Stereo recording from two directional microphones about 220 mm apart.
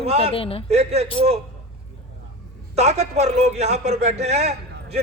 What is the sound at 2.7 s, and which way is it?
A man's voice, 30° right (ahead or behind).